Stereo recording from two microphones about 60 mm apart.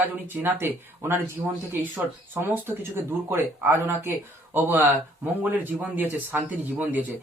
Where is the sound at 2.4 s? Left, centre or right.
Right.